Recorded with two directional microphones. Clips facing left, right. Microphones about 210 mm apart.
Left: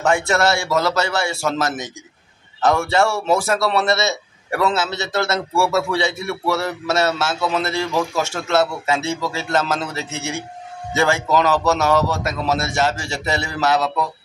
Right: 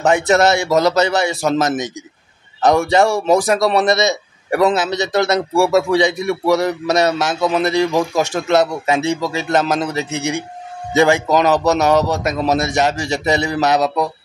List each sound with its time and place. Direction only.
0.0 s a man's voice: 20° right (ahead or behind)